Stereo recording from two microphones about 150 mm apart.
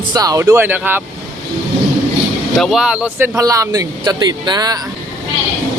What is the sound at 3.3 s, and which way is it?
Speech, 20° right (ahead or behind).